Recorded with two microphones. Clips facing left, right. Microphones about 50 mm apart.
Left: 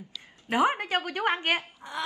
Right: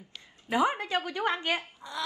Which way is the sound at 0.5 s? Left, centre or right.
Left.